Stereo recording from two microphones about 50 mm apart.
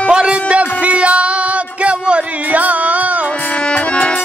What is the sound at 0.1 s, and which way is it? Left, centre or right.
Music, right.